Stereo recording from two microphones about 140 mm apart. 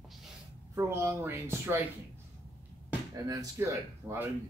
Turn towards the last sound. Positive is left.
turn(degrees=-20)  # may be behind; listen again after turning